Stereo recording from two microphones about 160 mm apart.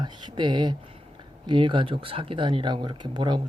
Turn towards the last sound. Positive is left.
turn(degrees=-30)  # may be behind; listen again after turning